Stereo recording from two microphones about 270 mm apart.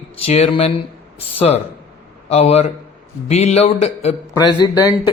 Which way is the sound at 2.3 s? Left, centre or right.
Left.